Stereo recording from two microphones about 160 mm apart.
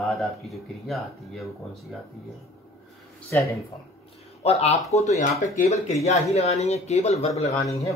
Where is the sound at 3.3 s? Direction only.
15° left (ahead or behind).